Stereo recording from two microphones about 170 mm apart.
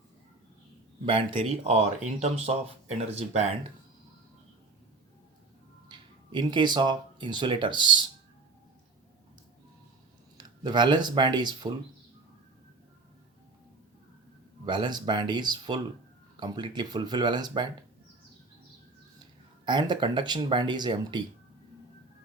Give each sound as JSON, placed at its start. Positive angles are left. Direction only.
{"t": 1.4, "sound": "speech", "side_deg": -40}
{"t": 5.9, "sound": "speech", "side_deg": -25}
{"t": 10.3, "sound": "speech", "side_deg": -25}
{"t": 14.6, "sound": "speech", "side_deg": -25}
{"t": 19.6, "sound": "speech", "side_deg": -25}